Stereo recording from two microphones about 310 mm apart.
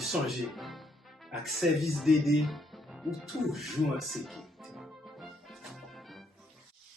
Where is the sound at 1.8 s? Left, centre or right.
Centre.